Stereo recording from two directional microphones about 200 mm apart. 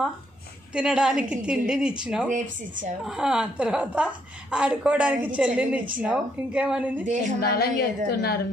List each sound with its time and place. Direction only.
0.7 s a woman's voice: 5° right (ahead or behind)
2.2 s speech: 40° right (ahead or behind)
3.1 s a woman's voice: 5° right (ahead or behind)
7.3 s a woman's voice: 50° left (ahead or behind)